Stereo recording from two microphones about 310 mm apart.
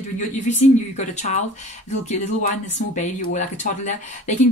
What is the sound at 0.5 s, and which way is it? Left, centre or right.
Speech, left.